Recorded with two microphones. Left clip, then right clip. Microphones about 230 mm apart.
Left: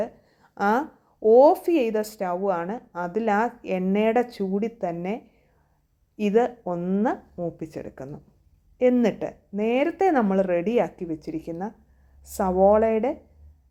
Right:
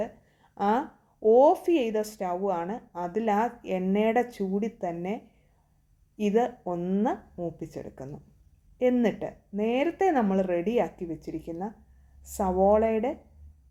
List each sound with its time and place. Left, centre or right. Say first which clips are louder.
0.5 s speech: left 3 dB; left